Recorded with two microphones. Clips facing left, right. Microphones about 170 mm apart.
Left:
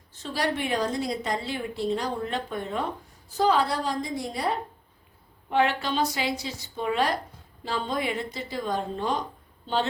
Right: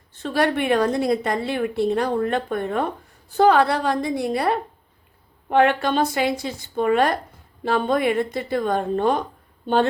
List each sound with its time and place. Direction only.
0.1 s a woman's voice: 60° right (ahead or behind)